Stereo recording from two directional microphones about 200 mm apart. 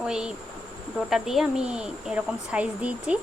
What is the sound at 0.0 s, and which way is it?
Speech, 5° right (ahead or behind).